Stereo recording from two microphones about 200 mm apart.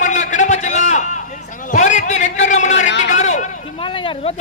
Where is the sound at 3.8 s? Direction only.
25° left (ahead or behind).